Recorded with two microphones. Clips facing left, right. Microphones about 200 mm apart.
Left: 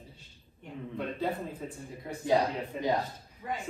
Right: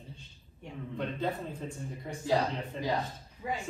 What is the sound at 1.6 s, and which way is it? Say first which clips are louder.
A man's voice: even; 10° left (ahead or behind).